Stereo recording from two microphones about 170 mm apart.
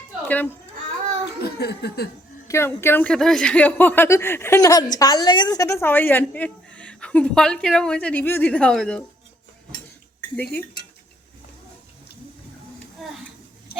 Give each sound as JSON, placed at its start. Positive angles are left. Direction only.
{"t": 0.3, "sound": "speech", "side_deg": 10}
{"t": 1.4, "sound": "speech", "side_deg": 70}
{"t": 2.5, "sound": "speech", "side_deg": 15}